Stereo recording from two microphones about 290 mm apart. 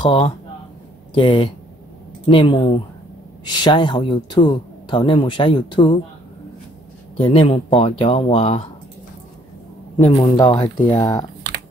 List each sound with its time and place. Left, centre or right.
0.0 s speech: centre
7.2 s speech: centre
9.9 s speech: centre